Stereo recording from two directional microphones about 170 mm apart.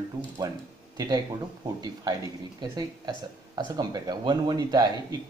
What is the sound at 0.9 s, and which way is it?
Speech, 25° right (ahead or behind).